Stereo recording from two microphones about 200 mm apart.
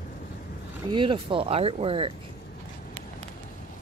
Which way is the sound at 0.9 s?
25° right (ahead or behind).